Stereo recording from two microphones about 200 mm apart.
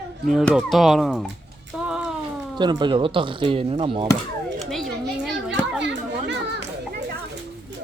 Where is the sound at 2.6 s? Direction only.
20° right (ahead or behind).